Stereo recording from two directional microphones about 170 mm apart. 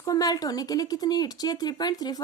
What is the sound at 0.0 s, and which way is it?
A woman's voice, 20° left (ahead or behind).